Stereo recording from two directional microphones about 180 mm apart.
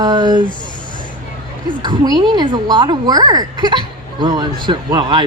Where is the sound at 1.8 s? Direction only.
25° right (ahead or behind).